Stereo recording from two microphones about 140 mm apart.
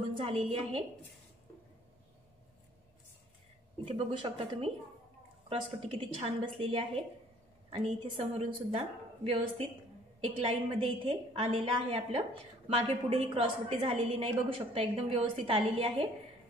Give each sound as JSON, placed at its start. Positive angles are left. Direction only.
{"t": 0.1, "sound": "a woman's voice", "side_deg": -40}
{"t": 3.8, "sound": "a woman's voice", "side_deg": -35}